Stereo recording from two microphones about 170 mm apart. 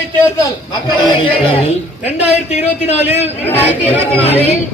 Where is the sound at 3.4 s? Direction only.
10° left (ahead or behind).